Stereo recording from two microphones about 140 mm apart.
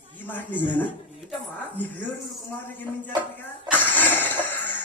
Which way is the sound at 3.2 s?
10° left (ahead or behind).